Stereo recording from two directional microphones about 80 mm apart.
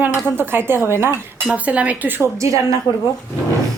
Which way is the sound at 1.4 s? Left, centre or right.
Centre.